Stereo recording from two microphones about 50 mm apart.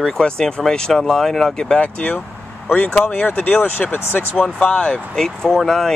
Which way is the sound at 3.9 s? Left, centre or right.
Left.